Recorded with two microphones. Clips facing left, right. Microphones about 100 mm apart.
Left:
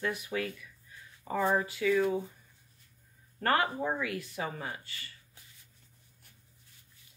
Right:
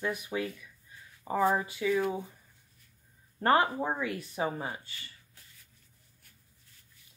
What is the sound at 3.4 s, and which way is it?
Speech, 25° right (ahead or behind).